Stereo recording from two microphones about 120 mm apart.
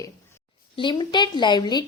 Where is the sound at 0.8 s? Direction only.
40° left (ahead or behind).